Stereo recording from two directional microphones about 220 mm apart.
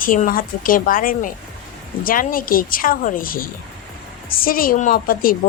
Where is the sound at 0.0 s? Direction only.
40° left (ahead or behind).